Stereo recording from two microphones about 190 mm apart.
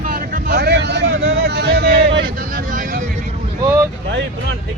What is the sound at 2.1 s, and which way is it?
Vehicle, 50° right (ahead or behind).